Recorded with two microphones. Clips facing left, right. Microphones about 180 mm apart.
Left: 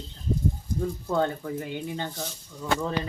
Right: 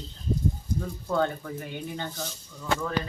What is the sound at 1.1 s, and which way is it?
Speech, 25° left (ahead or behind).